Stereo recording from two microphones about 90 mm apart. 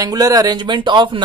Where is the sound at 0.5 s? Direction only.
60° right (ahead or behind).